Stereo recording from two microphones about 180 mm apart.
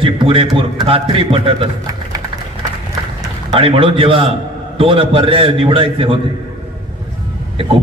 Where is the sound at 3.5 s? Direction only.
30° right (ahead or behind).